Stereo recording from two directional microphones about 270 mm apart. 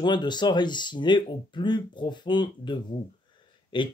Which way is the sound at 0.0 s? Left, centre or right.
Centre.